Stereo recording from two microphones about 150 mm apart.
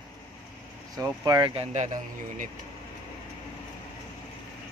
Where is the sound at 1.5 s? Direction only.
40° right (ahead or behind).